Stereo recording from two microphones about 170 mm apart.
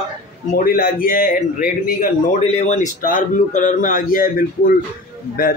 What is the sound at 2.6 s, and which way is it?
A man's voice, 45° left (ahead or behind).